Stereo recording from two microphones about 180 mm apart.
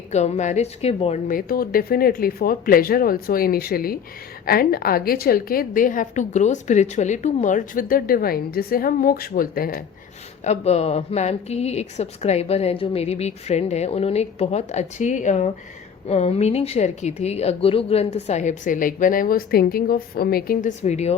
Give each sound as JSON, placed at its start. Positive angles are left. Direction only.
{"t": 0.1, "sound": "a woman's voice", "side_deg": 40}
{"t": 1.3, "sound": "a woman's voice", "side_deg": 50}
{"t": 10.4, "sound": "a woman's voice", "side_deg": 35}